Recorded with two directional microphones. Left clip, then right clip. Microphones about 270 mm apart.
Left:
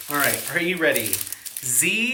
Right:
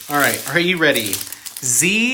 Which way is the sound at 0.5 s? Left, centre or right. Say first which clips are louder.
Right 6 dB; centre.